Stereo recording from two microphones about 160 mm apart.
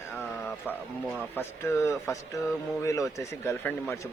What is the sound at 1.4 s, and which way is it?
Speech, 15° left (ahead or behind).